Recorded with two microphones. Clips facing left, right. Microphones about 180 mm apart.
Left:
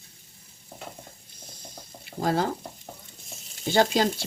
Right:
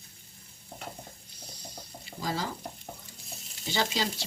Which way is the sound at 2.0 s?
55° left (ahead or behind).